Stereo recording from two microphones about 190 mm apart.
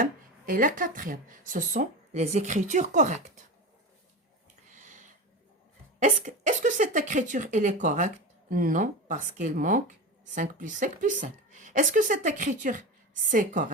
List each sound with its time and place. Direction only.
0.0 s speech: 45° right (ahead or behind)
6.0 s speech: 40° right (ahead or behind)